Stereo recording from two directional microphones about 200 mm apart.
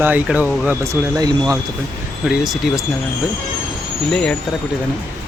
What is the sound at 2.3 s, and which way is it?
Speech, centre (ahead or behind).